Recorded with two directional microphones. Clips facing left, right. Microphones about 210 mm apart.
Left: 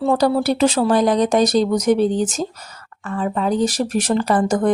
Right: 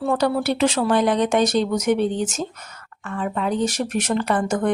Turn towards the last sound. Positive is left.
turn(degrees=35)  # may be behind; listen again after turning